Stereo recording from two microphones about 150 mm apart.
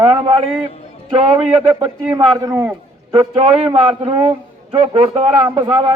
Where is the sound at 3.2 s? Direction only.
40° right (ahead or behind).